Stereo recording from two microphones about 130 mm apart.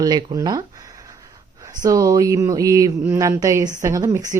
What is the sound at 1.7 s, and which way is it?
Speech, 30° right (ahead or behind).